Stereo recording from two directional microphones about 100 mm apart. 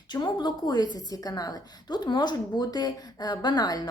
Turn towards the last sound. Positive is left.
turn(degrees=40)  # may be behind; listen again after turning